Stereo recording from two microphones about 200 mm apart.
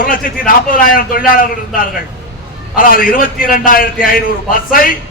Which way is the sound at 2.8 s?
45° left (ahead or behind).